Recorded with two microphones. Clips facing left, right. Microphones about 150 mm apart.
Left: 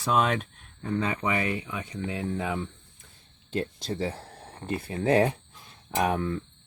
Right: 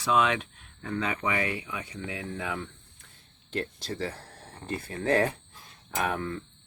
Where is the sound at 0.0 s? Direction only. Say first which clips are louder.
Even; 45° left (ahead or behind).